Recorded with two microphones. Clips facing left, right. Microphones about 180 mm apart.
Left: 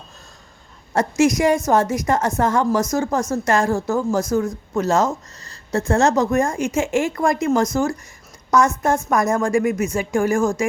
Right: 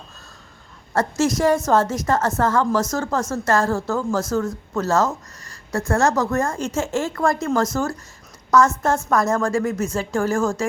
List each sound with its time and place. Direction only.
0.9 s a woman's voice: 15° left (ahead or behind)